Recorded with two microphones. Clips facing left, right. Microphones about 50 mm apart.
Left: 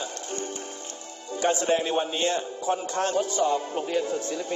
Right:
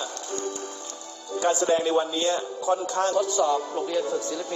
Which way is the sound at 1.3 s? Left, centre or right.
Left.